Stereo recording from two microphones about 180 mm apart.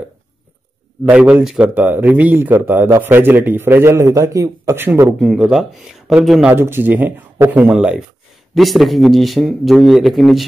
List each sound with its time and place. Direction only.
1.0 s speech: 5° right (ahead or behind)